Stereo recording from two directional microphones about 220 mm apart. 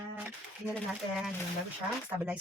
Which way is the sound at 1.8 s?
5° right (ahead or behind).